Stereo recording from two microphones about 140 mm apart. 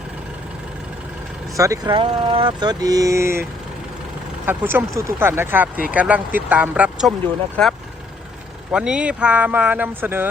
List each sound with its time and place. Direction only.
1.5 s speech: 25° right (ahead or behind)
1.9 s speech: 35° right (ahead or behind); by 3.4 s 20° right (ahead or behind)
4.4 s speech: 15° right (ahead or behind)
7.5 s speech: 5° left (ahead or behind); by 10.2 s 15° right (ahead or behind)